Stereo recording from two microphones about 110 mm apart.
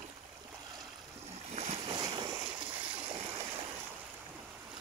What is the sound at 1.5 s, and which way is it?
Boat, 75° right (ahead or behind).